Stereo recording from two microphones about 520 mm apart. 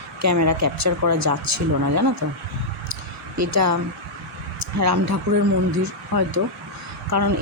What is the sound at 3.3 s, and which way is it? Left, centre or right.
Speech, right.